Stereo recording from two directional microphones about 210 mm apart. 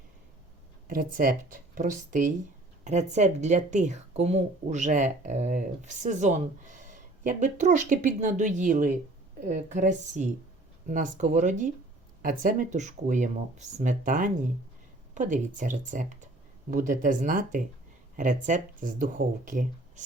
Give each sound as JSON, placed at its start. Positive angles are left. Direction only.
{"t": 0.9, "sound": "speech", "side_deg": -40}